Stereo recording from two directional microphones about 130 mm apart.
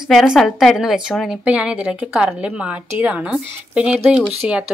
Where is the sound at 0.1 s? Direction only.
Centre (ahead or behind).